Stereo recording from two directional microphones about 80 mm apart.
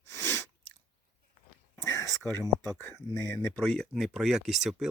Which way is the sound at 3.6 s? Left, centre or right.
Centre.